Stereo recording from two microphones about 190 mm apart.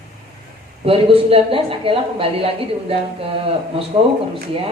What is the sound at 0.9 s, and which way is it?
A woman's voice, 30° right (ahead or behind).